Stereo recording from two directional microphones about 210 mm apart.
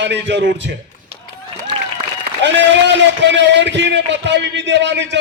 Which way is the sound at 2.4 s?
55° right (ahead or behind).